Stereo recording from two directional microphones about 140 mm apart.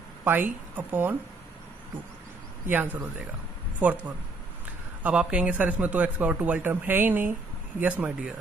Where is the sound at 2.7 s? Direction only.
15° right (ahead or behind).